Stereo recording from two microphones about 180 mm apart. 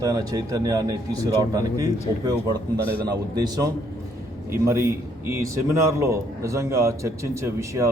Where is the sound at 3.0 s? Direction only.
20° right (ahead or behind).